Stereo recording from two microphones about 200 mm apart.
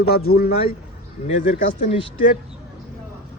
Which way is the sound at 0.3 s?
50° left (ahead or behind).